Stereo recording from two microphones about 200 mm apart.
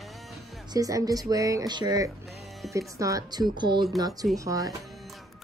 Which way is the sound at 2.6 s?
Centre (ahead or behind).